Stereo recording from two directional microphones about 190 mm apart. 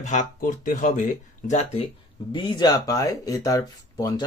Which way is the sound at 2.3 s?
25° left (ahead or behind).